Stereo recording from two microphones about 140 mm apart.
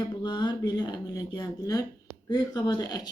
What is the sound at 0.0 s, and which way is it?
Speech, 30° left (ahead or behind).